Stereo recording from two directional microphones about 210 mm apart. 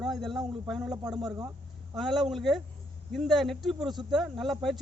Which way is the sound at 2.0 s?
Centre (ahead or behind).